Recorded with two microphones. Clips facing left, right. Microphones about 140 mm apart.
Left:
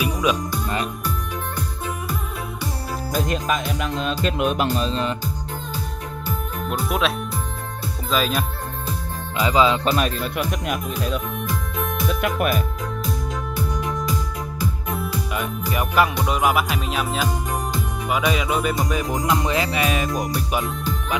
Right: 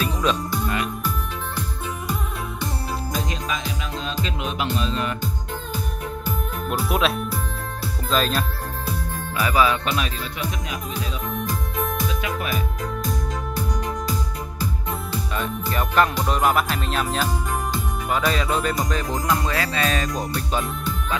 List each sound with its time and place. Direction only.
0.0 s music: 10° left (ahead or behind)
3.3 s speech: 55° left (ahead or behind)
4.2 s music: 55° left (ahead or behind)
4.7 s music: 35° left (ahead or behind)
6.7 s speech: 5° right (ahead or behind)
9.4 s speech: 20° left (ahead or behind)
9.8 s speech: 45° left (ahead or behind)
11.7 s music: centre (ahead or behind)
12.1 s speech: 55° left (ahead or behind)
15.3 s music: 10° left (ahead or behind)